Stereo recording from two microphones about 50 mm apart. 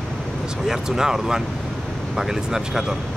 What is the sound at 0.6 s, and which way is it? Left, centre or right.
Speech, centre.